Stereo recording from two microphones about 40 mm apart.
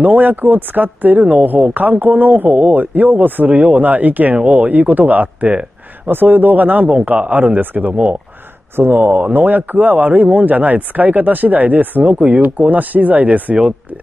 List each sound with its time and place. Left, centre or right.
0.0 s speech: right
2.5 s speech: right
2.8 s speech: right
4.4 s speech: right
4.6 s speech: right
6.0 s speech: right
7.9 s speech: right
8.8 s speech: right
9.3 s speech: right
12.0 s speech: right
12.4 s speech: right